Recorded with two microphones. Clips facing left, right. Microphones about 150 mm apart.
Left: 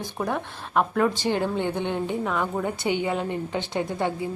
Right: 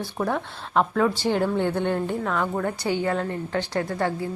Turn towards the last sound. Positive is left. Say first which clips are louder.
# right 1 dB
turn(degrees=20)  # may be behind; listen again after turning